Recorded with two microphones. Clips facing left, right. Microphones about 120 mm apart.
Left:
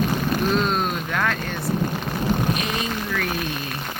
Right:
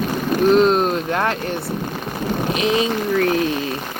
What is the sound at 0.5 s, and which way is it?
Vehicle, 20° right (ahead or behind).